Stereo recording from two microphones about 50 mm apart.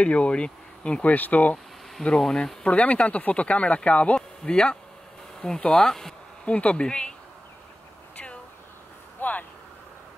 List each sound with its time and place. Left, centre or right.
0.0 s speech: left
1.0 s speech: left
2.1 s speech: centre
6.4 s speech: left
9.2 s vehicle: left